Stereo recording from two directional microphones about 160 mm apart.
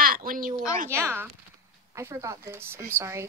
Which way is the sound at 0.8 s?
15° right (ahead or behind).